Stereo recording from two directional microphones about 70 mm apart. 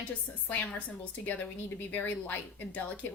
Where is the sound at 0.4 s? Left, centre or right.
Left.